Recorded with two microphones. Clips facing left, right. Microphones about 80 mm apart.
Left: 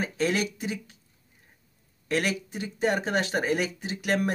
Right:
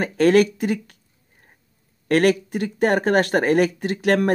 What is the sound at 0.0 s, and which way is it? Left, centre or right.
Speech, right.